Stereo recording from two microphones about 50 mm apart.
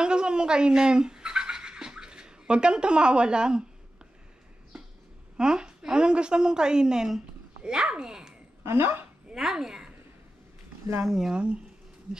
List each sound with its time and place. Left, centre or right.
0.0 s a sound: centre
5.4 s a woman's voice: centre
8.6 s a woman's voice: right
9.3 s speech: centre
11.1 s a woman's voice: centre
11.3 s speech: right